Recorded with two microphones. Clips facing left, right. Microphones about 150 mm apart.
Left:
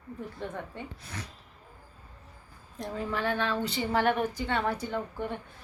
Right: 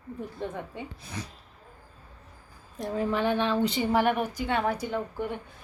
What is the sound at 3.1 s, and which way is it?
A woman's voice, 20° right (ahead or behind).